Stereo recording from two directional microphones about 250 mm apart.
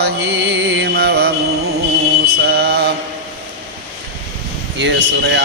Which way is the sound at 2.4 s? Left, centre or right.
Right.